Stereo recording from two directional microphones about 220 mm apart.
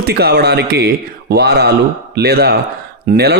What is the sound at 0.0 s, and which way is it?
Speech, 45° right (ahead or behind).